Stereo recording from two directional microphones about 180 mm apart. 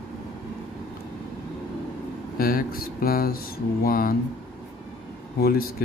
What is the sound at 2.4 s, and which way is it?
Speech, 55° left (ahead or behind).